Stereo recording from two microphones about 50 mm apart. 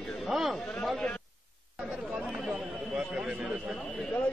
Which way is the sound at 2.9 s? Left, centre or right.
Right.